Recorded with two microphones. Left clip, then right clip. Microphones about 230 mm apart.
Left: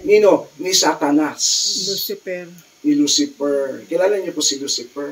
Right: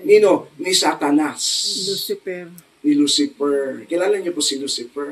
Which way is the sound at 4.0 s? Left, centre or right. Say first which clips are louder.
Left 2 dB; right.